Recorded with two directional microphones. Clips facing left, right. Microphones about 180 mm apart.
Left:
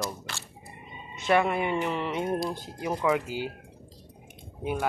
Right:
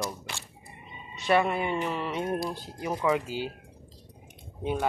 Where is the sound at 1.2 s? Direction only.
10° left (ahead or behind).